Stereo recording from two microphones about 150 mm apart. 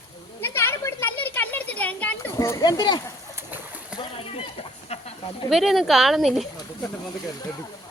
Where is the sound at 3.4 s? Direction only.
10° right (ahead or behind).